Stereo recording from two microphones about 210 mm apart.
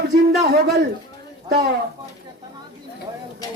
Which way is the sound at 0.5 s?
50° right (ahead or behind).